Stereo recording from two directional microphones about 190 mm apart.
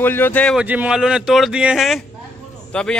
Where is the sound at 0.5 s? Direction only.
5° right (ahead or behind).